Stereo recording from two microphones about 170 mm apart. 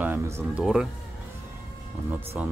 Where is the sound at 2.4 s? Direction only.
5° right (ahead or behind).